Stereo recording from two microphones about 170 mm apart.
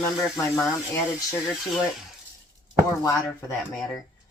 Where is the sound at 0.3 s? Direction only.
15° left (ahead or behind).